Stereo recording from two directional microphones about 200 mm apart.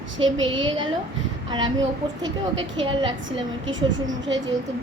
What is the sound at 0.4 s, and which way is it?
A woman's voice, 25° right (ahead or behind).